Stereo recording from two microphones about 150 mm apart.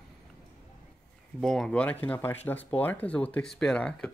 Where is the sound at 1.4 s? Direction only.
5° left (ahead or behind).